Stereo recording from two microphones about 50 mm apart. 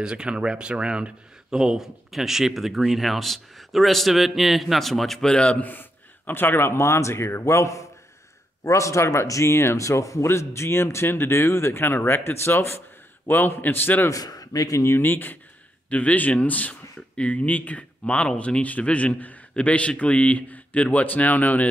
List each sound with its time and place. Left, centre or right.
0.0 s speech: centre
5.2 s speech: centre
5.6 s speech: left
10.2 s speech: left
13.3 s speech: left
14.8 s speech: left
15.0 s speech: left